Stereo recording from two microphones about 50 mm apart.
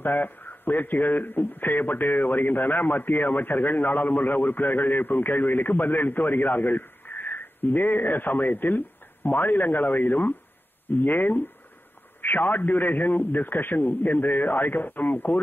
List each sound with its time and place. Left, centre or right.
0.0 s a man's voice: left